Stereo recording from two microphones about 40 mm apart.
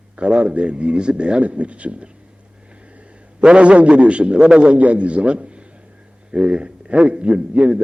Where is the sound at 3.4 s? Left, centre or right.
Right.